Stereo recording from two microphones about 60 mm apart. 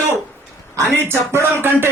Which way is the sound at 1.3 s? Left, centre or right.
Right.